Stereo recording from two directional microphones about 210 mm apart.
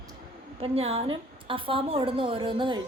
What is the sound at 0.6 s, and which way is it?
A woman's voice, 30° right (ahead or behind).